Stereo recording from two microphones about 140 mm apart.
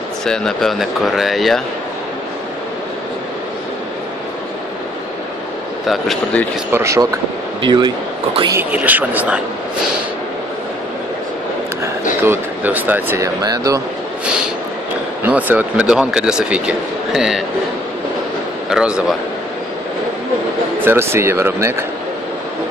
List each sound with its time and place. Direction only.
0.2 s speech: 5° left (ahead or behind)
5.9 s speech: centre (ahead or behind)
6.7 s speech: 20° right (ahead or behind)
7.6 s speech: 35° right (ahead or behind)
8.7 s speech: 10° right (ahead or behind)
12.2 s speech: 15° right (ahead or behind)
13.4 s speech: 25° right (ahead or behind)
15.2 s speech: 10° right (ahead or behind)
18.7 s speech: 5° right (ahead or behind)
20.8 s speech: 15° right (ahead or behind)